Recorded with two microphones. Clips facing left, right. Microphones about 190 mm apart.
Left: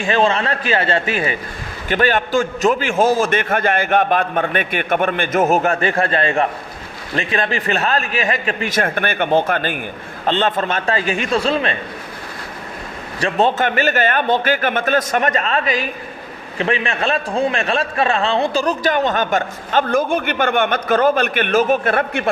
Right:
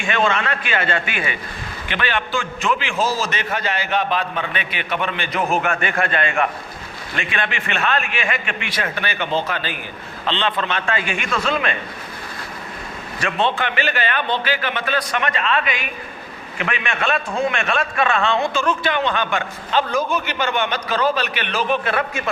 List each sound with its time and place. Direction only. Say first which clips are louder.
0.0 s a man's voice: left 4 dB; 35° left (ahead or behind)
13.1 s a man's voice: left 5 dB; 40° left (ahead or behind)